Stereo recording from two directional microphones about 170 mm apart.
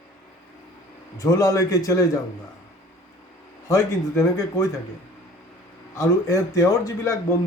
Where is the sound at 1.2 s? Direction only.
20° left (ahead or behind).